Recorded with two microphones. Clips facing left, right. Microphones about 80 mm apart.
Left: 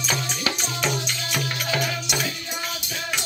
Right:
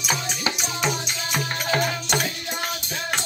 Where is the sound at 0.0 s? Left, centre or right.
Centre.